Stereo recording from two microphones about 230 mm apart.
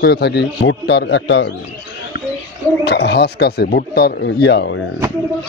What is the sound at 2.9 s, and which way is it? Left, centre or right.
A man's voice, left.